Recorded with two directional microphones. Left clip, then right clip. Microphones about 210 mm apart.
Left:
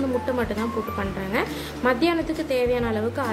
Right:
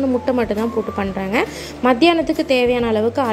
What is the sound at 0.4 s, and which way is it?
A woman's voice, 30° right (ahead or behind).